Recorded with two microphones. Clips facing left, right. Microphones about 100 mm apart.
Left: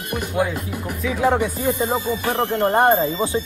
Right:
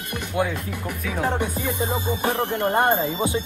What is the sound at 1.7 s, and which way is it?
Music, 55° left (ahead or behind).